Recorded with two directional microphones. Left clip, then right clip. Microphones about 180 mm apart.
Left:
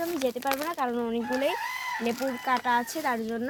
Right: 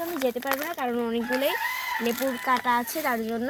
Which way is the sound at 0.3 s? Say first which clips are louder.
Right 1 dB; 35° left (ahead or behind).